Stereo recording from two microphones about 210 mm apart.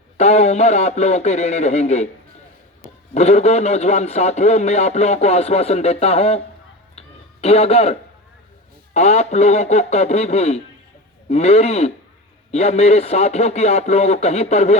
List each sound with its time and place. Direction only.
0.2 s a man's voice: 30° left (ahead or behind)
3.2 s a man's voice: 30° left (ahead or behind)
7.4 s a man's voice: 30° left (ahead or behind)